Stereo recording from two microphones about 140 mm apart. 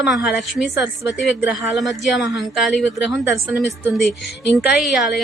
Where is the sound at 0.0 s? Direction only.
5° right (ahead or behind).